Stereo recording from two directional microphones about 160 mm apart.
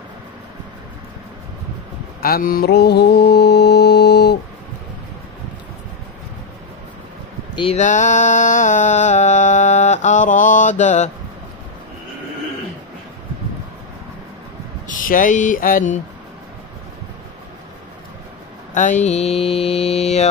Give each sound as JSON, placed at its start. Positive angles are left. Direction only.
{"t": 2.2, "sound": "mantra", "side_deg": 70}
{"t": 7.5, "sound": "speech", "side_deg": 35}
{"t": 7.8, "sound": "mantra", "side_deg": 50}
{"t": 14.9, "sound": "speech", "side_deg": 55}
{"t": 19.0, "sound": "mantra", "side_deg": 40}